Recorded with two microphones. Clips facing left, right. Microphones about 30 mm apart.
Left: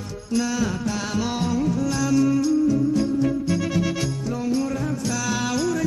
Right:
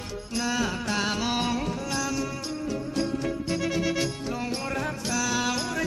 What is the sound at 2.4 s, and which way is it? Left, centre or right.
Music, right.